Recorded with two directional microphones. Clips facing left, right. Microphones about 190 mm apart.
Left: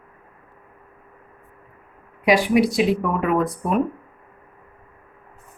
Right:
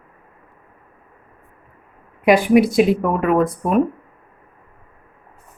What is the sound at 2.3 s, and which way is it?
Speech, 50° right (ahead or behind).